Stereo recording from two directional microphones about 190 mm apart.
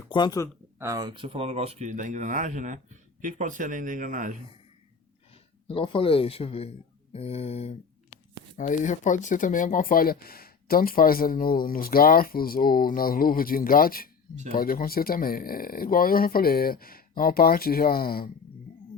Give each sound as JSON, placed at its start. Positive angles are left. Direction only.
{"t": 0.1, "sound": "speech", "side_deg": 20}
{"t": 0.8, "sound": "speech", "side_deg": -20}
{"t": 5.3, "sound": "speech", "side_deg": 30}